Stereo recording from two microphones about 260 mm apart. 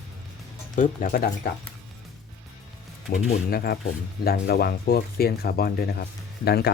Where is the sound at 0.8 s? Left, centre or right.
Left.